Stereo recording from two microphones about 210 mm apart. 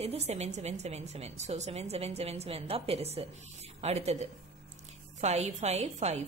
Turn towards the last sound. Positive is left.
turn(degrees=-30)  # may be behind; listen again after turning